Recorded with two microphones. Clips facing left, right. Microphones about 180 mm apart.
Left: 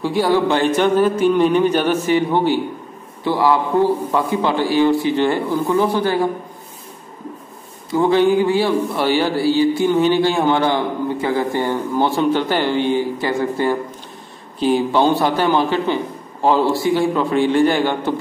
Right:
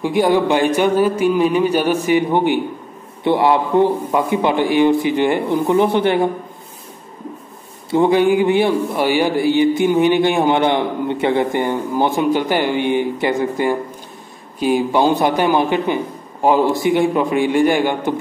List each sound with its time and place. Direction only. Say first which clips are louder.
0.0 s a man's voice: right 1 dB; 15° right (ahead or behind)
7.9 s a man's voice: right 1 dB; 20° right (ahead or behind)